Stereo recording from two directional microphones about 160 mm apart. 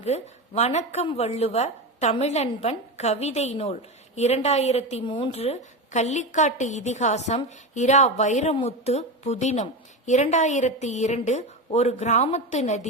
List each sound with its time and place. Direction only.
0.0 s speech: 40° left (ahead or behind)